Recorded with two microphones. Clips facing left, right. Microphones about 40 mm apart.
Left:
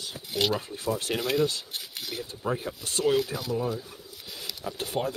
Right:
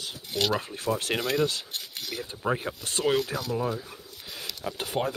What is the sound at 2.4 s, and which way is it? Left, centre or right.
Speech, right.